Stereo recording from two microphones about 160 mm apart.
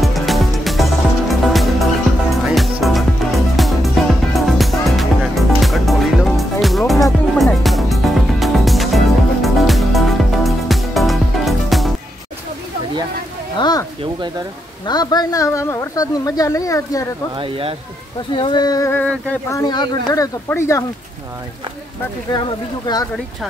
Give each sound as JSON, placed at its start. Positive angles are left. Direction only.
{"t": 0.0, "sound": "music", "side_deg": 0}
{"t": 13.6, "sound": "a sound", "side_deg": 25}
{"t": 14.9, "sound": "speech", "side_deg": 25}
{"t": 17.4, "sound": "speech", "side_deg": -35}
{"t": 18.3, "sound": "speech", "side_deg": 30}
{"t": 18.9, "sound": "speech", "side_deg": 10}
{"t": 19.5, "sound": "speech", "side_deg": 25}